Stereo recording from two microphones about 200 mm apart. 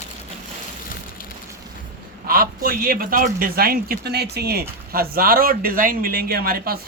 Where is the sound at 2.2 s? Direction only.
45° right (ahead or behind).